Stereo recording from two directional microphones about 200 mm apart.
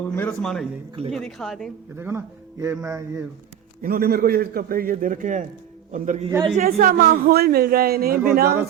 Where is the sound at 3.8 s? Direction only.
50° right (ahead or behind).